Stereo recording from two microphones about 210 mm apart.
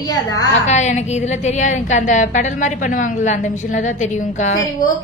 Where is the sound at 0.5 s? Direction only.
35° left (ahead or behind).